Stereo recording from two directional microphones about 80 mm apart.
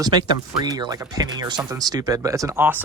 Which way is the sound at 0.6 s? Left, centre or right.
Right.